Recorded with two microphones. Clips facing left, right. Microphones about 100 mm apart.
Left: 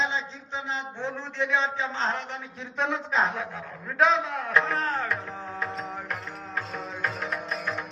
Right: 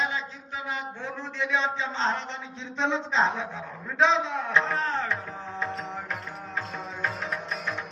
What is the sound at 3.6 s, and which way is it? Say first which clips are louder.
Music: left 1 dB; 5° right (ahead or behind).